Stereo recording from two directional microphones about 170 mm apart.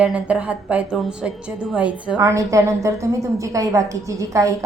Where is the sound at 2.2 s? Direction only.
20° right (ahead or behind).